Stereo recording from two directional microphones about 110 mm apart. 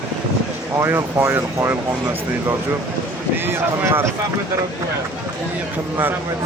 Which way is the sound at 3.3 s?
20° right (ahead or behind).